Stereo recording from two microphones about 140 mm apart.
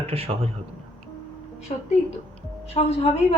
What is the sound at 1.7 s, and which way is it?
A woman's voice, 45° left (ahead or behind).